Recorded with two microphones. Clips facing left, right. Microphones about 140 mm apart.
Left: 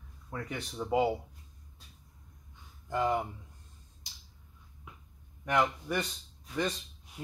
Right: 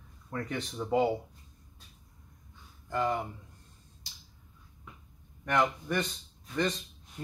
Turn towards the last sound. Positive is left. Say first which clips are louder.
# right 2 dB
turn(degrees=10)  # may be behind; listen again after turning